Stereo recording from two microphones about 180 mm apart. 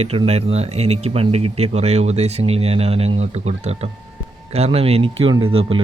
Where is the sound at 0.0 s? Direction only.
35° right (ahead or behind).